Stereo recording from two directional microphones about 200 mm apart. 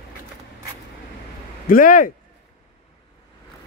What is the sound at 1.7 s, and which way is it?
Speech, 45° left (ahead or behind).